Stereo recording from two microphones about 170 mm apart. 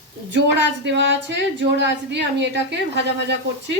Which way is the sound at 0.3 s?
90° right.